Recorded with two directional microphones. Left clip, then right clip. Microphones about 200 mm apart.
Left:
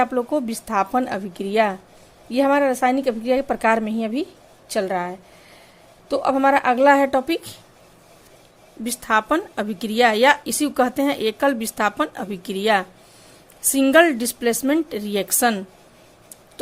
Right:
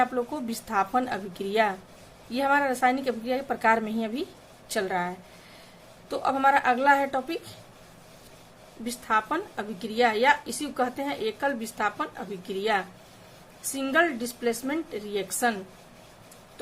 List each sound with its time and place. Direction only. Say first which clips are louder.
0.0 s a woman's voice: left 6 dB; 35° left (ahead or behind)
8.8 s a woman's voice: left 6 dB; 50° left (ahead or behind)